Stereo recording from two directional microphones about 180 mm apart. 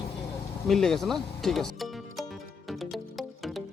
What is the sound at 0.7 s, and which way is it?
Speech, centre (ahead or behind).